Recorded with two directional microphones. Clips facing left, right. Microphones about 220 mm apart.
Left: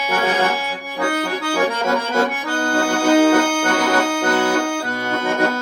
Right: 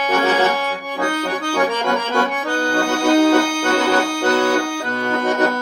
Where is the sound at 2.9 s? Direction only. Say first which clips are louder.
Even; 50° left (ahead or behind).